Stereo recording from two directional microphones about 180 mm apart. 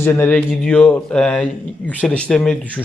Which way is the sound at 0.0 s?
10° left (ahead or behind).